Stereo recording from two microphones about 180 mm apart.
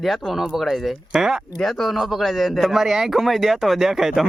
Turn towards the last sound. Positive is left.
turn(degrees=0)  # may be behind; listen again after turning